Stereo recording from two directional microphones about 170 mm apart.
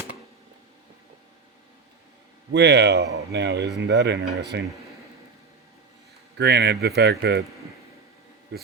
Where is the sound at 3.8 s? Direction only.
90° right.